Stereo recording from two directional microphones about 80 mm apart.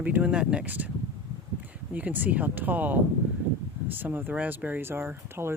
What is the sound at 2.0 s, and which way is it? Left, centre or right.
Speech, right.